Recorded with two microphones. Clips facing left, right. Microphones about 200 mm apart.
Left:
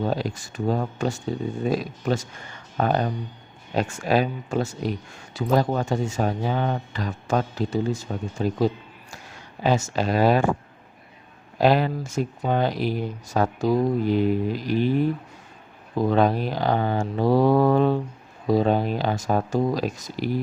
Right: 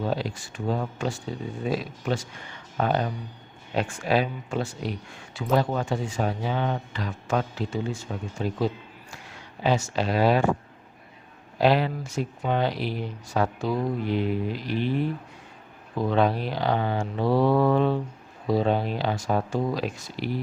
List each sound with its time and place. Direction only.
0.0 s speech: 45° left (ahead or behind)
11.5 s speech: 45° left (ahead or behind)